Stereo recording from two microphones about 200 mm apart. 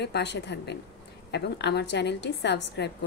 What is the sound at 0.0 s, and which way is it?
Speech, 60° left (ahead or behind).